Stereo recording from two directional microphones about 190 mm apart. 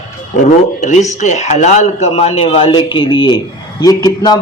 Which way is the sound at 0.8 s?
40° left (ahead or behind).